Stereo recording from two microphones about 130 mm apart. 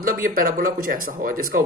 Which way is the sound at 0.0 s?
90° right.